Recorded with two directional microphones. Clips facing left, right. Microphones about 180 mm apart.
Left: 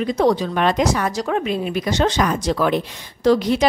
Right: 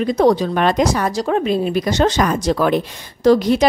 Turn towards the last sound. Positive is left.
turn(degrees=-45)  # may be behind; listen again after turning